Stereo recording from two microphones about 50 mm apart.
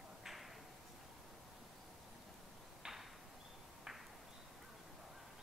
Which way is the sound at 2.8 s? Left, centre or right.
Centre.